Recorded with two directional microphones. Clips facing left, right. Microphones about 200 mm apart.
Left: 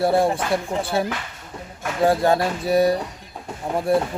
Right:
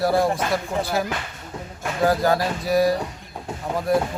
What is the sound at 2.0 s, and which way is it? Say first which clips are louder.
Speech: left 2 dB; 25° left (ahead or behind).